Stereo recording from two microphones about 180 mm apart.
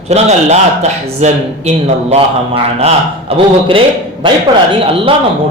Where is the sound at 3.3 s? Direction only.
35° right (ahead or behind).